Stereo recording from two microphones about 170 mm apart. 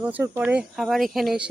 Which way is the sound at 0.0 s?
10° right (ahead or behind).